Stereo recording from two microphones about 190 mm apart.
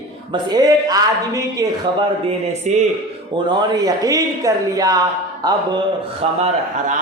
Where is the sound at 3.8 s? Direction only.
20° right (ahead or behind).